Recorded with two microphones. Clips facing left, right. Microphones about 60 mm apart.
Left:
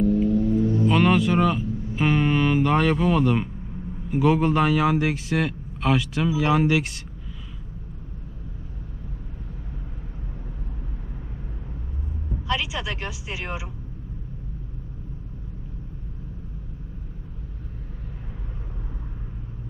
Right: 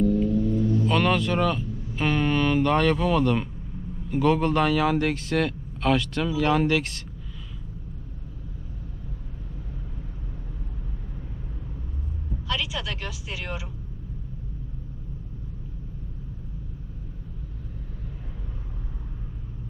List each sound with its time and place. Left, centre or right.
0.0 s music: centre
0.9 s a man's voice: centre
12.5 s a sound: centre